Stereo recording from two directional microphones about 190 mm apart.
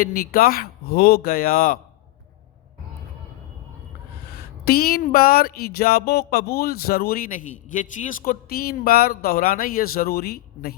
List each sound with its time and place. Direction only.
0.0 s speech: 50° left (ahead or behind)
4.6 s speech: 55° left (ahead or behind)